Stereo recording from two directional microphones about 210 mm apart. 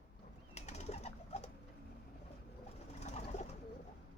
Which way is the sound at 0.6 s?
30° left (ahead or behind).